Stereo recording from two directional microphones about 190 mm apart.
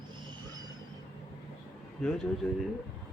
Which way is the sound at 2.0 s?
5° left (ahead or behind).